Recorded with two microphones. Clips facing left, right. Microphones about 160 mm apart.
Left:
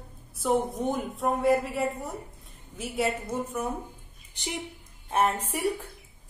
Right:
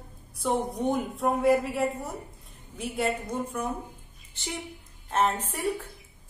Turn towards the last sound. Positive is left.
turn(degrees=10)  # may be behind; listen again after turning